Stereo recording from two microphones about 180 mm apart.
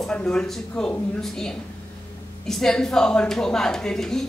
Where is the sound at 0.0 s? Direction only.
5° left (ahead or behind).